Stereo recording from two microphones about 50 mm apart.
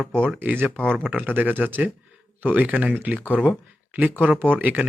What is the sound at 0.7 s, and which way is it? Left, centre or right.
Speech, centre.